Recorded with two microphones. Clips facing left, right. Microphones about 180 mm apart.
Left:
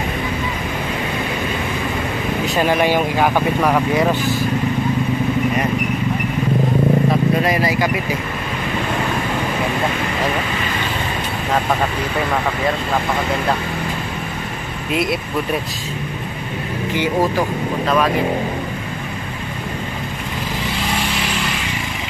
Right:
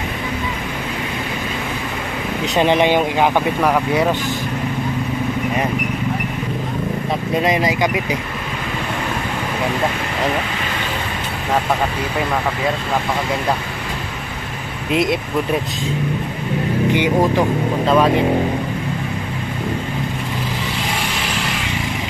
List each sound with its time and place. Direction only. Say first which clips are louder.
2.4 s speech: right 2 dB; 20° right (ahead or behind)
7.4 s speech: even; 20° right (ahead or behind)
17.8 s speech: right 3 dB; 25° right (ahead or behind)